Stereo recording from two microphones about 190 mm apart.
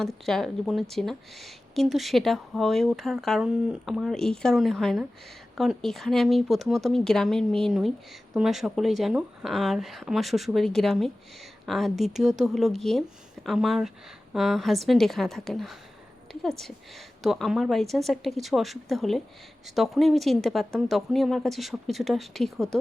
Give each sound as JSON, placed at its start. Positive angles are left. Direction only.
{"t": 0.0, "sound": "speech", "side_deg": 0}